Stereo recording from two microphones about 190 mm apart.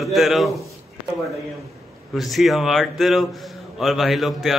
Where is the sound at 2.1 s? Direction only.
Centre (ahead or behind).